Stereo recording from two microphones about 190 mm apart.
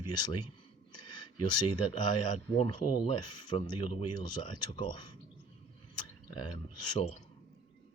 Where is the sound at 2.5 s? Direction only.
25° left (ahead or behind).